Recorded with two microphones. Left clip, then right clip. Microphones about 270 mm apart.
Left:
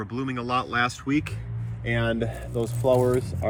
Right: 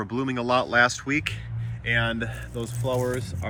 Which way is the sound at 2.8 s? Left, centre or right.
Left.